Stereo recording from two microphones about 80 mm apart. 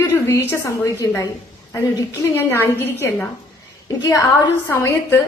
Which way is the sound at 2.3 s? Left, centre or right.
Left.